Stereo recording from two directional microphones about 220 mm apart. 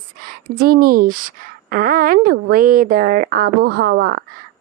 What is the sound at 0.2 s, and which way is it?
A woman's voice, 40° right (ahead or behind).